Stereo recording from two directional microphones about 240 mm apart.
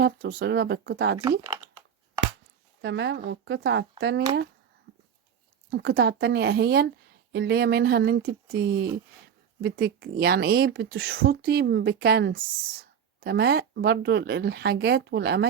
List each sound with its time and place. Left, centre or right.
0.0 s speech: right
2.8 s speech: right
5.7 s speech: right